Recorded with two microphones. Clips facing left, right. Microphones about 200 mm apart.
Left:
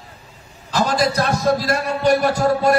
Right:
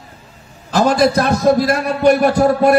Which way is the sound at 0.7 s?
55° right (ahead or behind).